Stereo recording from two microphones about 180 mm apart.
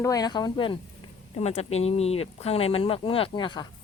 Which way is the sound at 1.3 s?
35° left (ahead or behind).